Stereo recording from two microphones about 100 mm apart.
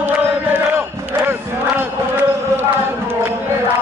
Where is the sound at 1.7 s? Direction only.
20° right (ahead or behind).